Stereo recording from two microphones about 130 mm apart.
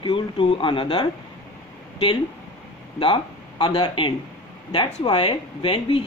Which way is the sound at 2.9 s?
40° left (ahead or behind).